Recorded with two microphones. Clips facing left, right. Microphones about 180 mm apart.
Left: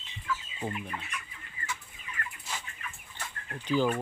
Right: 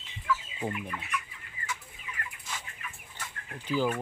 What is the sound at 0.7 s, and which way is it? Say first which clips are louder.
Chicken: right 2 dB; 30° left (ahead or behind).